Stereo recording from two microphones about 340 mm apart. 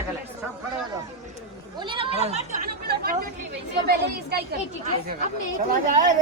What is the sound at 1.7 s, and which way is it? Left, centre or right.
Speech, centre.